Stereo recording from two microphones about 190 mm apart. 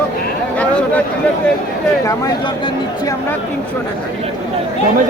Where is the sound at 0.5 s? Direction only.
5° left (ahead or behind).